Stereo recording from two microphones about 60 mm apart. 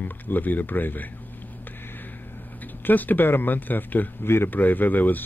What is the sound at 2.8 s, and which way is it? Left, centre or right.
Speech, left.